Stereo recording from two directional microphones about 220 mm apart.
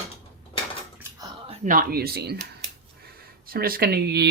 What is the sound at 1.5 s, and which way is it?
Speech, 35° right (ahead or behind).